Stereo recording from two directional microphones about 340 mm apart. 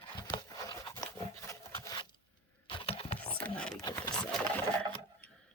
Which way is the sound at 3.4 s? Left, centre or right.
Centre.